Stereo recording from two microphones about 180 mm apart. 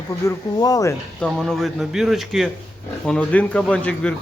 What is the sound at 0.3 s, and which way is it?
Speech, 20° left (ahead or behind).